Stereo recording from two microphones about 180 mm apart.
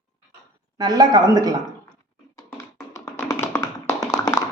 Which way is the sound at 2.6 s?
15° left (ahead or behind).